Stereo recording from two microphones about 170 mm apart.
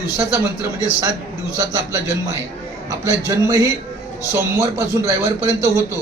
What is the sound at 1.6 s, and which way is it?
A man's voice, 20° right (ahead or behind).